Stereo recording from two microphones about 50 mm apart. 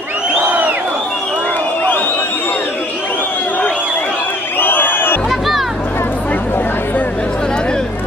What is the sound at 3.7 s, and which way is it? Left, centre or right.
Crowd, centre.